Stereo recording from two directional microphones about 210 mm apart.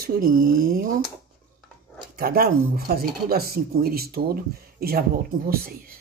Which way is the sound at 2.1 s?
45° right (ahead or behind).